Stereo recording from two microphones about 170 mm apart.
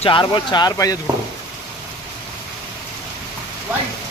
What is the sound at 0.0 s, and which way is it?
Speech, 30° left (ahead or behind).